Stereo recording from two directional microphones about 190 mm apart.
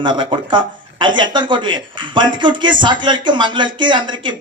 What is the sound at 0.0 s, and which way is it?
A man's voice, 25° right (ahead or behind).